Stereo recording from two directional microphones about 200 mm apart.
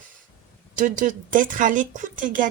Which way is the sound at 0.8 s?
40° right (ahead or behind).